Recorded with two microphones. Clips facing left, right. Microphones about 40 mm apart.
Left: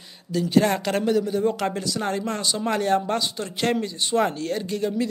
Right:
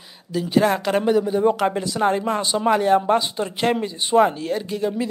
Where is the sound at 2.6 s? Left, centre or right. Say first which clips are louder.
Right 6 dB; centre.